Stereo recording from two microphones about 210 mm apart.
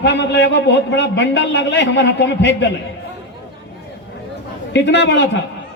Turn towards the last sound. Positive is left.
turn(degrees=55)  # may be behind; listen again after turning